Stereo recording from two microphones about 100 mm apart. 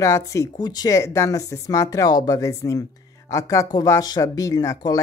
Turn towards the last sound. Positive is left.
turn(degrees=35)  # may be behind; listen again after turning